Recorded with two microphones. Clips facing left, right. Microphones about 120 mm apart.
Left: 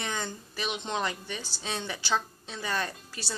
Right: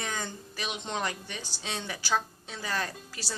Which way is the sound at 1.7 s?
20° left (ahead or behind).